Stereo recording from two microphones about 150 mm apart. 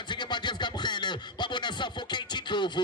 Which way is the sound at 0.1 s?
30° left (ahead or behind).